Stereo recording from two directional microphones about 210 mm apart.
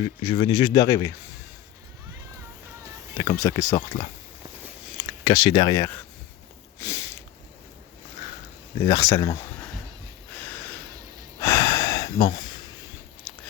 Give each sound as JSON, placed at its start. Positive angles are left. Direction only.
{"t": 0.0, "sound": "speech", "side_deg": 25}
{"t": 3.2, "sound": "speech", "side_deg": 15}
{"t": 5.2, "sound": "speech", "side_deg": 25}
{"t": 6.7, "sound": "a sound", "side_deg": 15}
{"t": 8.8, "sound": "speech", "side_deg": 15}
{"t": 11.3, "sound": "gasp", "side_deg": 15}
{"t": 13.3, "sound": "chewing", "side_deg": 0}